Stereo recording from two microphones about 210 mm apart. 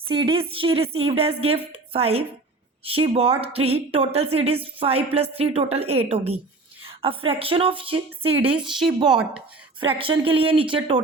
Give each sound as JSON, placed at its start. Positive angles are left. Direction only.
{"t": 0.1, "sound": "a woman's voice", "side_deg": -25}
{"t": 9.8, "sound": "a woman's voice", "side_deg": -25}